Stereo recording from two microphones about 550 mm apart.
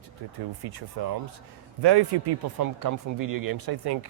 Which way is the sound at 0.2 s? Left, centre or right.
Right.